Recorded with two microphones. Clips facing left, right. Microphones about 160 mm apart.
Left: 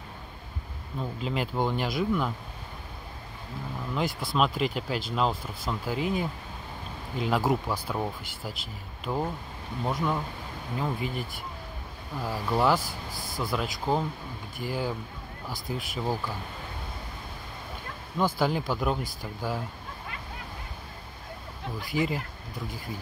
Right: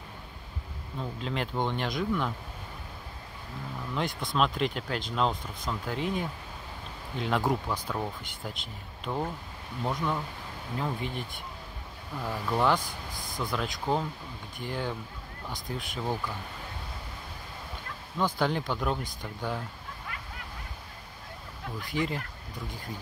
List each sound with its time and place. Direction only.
1.2 s speech: 5° left (ahead or behind)
3.9 s speech: 5° left (ahead or behind)
18.1 s speech: 10° left (ahead or behind)
21.9 s speech: 5° left (ahead or behind)